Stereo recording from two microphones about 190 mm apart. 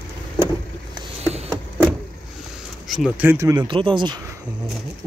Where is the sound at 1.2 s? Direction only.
35° right (ahead or behind).